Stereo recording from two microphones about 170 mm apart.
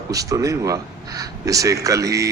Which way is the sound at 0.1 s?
20° right (ahead or behind).